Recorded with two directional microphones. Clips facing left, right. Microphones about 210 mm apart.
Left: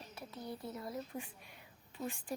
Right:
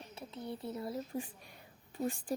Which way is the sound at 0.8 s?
30° right (ahead or behind).